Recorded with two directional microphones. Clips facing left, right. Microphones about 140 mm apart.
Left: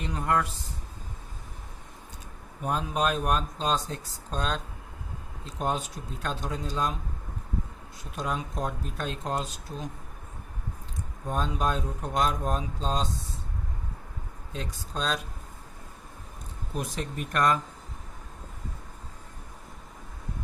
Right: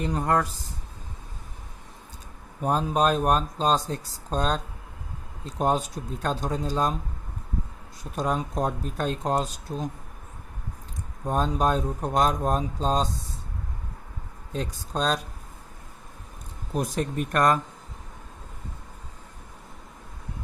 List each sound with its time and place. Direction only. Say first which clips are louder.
0.0 s speech: right 3 dB; 40° right (ahead or behind)
2.6 s speech: right 5 dB; 35° right (ahead or behind)
8.1 s speech: right 5 dB; 40° right (ahead or behind)
11.3 s speech: right 5 dB; 40° right (ahead or behind)
14.5 s speech: right 5 dB; 40° right (ahead or behind)
16.7 s speech: right 6 dB; 45° right (ahead or behind)